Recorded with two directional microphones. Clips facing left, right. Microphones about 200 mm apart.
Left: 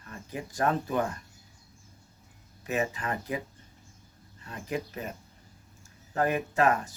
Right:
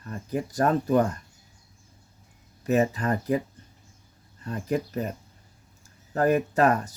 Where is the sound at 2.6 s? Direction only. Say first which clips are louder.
Right 7 dB; 40° right (ahead or behind).